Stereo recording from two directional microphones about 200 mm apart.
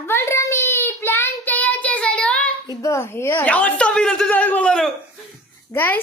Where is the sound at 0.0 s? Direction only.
15° left (ahead or behind).